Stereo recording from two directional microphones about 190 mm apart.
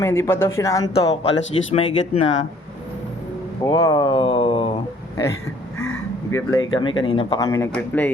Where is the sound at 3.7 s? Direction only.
20° left (ahead or behind).